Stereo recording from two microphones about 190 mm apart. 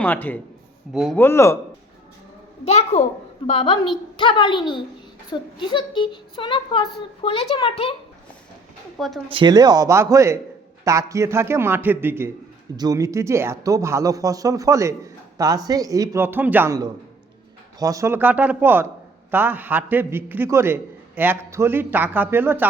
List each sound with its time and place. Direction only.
0.0 s speech: 10° left (ahead or behind)
1.2 s speech: 15° left (ahead or behind)
2.6 s a child's voice: 35° left (ahead or behind)
9.0 s speech: centre (ahead or behind)
9.3 s a man's voice: 25° right (ahead or behind)